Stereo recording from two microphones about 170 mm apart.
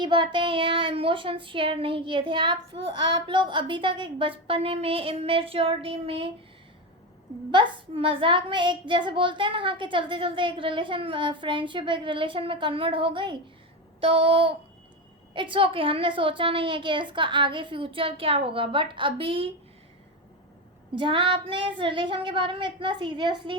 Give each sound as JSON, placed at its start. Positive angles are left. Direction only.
{"t": 0.0, "sound": "speech", "side_deg": -30}
{"t": 7.5, "sound": "a woman's voice", "side_deg": -30}
{"t": 20.9, "sound": "a woman's voice", "side_deg": -30}